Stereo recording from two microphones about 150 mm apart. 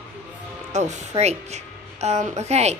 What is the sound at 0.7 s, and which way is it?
Speech, 50° right (ahead or behind).